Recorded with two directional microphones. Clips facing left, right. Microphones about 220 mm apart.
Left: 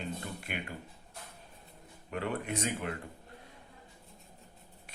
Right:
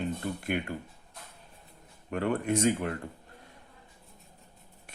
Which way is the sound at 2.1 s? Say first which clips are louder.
Right 7 dB; 45° right (ahead or behind).